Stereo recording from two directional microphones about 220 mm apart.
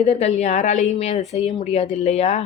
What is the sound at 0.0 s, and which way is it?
A woman's voice, 30° left (ahead or behind).